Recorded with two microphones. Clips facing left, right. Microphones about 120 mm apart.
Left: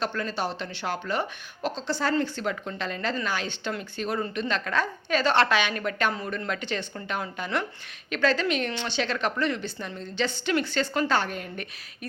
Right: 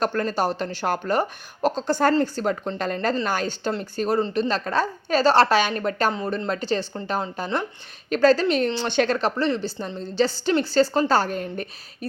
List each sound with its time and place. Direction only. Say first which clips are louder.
0.0 s a woman's voice: right 6 dB; 45° right (ahead or behind)
8.9 s speech: right 9 dB; 50° right (ahead or behind)
9.1 s a woman's voice: right 4 dB; 30° right (ahead or behind)